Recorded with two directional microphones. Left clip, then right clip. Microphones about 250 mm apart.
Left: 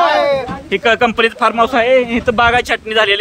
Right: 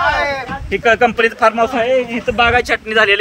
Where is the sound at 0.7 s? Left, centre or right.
Centre.